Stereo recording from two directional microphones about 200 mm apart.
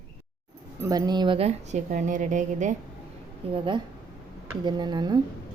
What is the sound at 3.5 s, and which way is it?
Speech, 25° right (ahead or behind).